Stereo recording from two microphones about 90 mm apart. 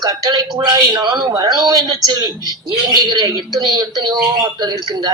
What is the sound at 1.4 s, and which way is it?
A man's voice, 50° right (ahead or behind).